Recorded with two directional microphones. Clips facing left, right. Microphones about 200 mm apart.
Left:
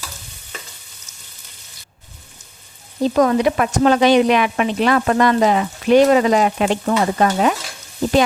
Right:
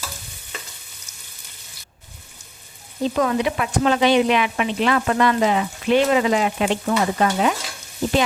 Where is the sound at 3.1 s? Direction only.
40° left (ahead or behind).